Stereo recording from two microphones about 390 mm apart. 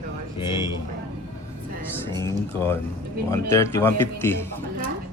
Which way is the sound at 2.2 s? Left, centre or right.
Centre.